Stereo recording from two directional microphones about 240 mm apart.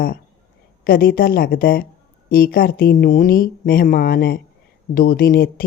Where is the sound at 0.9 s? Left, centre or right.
Left.